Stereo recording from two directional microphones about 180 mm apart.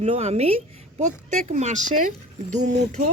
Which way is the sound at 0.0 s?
35° right (ahead or behind).